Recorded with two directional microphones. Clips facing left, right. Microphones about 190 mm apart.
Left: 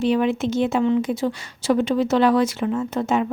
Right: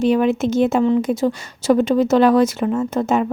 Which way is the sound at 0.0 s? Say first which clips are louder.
Right 4 dB; 45° right (ahead or behind).